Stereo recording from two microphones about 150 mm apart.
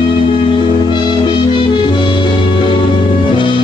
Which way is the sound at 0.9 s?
30° left (ahead or behind).